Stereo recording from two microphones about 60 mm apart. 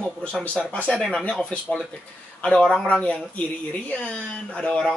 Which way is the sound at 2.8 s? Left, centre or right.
Centre.